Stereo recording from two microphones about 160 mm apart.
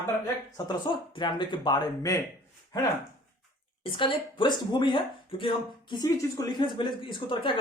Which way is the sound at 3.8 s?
30° left (ahead or behind).